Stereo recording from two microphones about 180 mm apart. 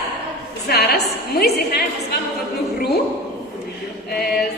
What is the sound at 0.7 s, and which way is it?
A woman's voice, 60° left (ahead or behind).